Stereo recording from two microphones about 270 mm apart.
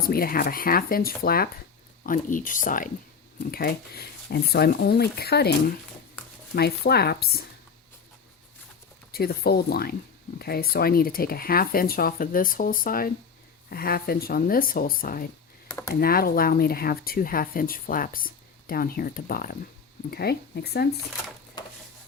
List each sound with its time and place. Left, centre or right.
0.0 s speech: left
9.1 s speech: left
15.7 s speech: centre
16.0 s speech: left